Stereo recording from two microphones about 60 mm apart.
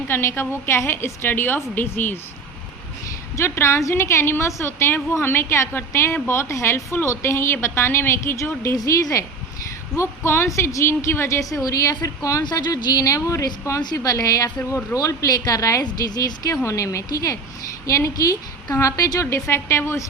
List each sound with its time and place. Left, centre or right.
0.1 s a woman's voice: left
3.3 s a woman's voice: left
8.7 s speech: left
9.9 s a woman's voice: left
14.9 s a woman's voice: left
16.0 s a woman's voice: left
16.6 s a woman's voice: left
17.8 s a woman's voice: left
19.2 s a woman's voice: left